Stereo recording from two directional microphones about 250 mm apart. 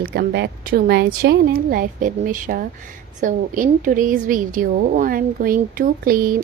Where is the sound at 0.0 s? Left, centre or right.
Right.